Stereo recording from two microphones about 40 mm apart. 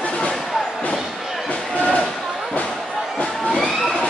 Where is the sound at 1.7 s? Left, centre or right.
Left.